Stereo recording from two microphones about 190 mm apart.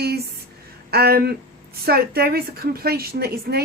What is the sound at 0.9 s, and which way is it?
Speech, 55° right (ahead or behind).